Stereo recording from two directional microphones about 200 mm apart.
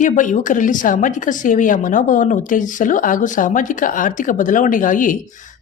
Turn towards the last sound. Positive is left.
turn(degrees=40)  # may be behind; listen again after turning